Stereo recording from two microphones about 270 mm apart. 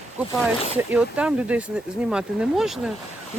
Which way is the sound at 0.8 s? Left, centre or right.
Centre.